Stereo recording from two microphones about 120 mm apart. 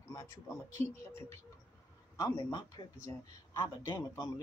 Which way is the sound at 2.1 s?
35° left (ahead or behind).